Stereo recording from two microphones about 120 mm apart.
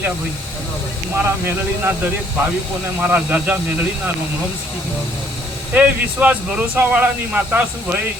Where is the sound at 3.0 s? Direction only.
15° right (ahead or behind).